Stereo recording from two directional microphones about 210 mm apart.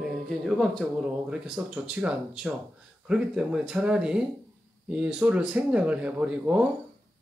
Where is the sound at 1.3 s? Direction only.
5° right (ahead or behind).